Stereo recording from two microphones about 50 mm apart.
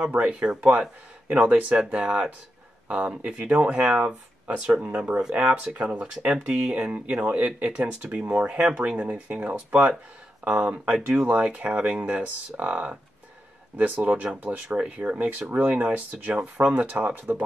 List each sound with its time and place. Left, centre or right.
0.3 s speech: right
13.7 s speech: right
15.1 s speech: right